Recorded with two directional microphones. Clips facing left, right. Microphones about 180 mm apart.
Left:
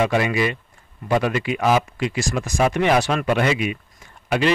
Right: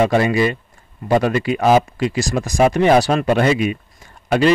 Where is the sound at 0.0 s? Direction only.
35° right (ahead or behind).